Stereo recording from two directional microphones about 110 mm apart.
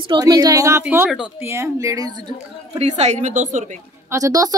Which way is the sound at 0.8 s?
15° right (ahead or behind).